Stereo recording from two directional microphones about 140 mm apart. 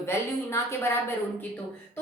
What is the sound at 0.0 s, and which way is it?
Speech, 20° left (ahead or behind).